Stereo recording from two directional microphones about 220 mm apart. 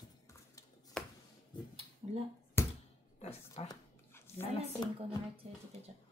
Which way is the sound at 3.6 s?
15° left (ahead or behind).